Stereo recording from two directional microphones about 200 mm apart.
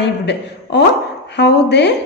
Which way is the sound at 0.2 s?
55° left (ahead or behind).